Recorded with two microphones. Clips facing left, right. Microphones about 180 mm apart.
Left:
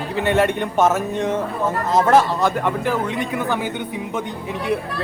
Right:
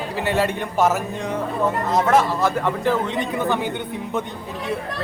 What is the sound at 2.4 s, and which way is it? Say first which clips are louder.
A man's voice: even; 15° left (ahead or behind).